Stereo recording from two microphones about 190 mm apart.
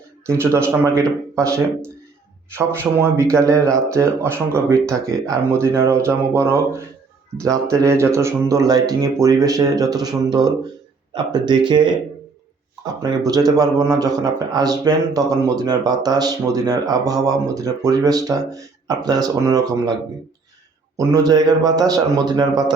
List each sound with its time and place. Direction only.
0.3 s speech: 15° right (ahead or behind)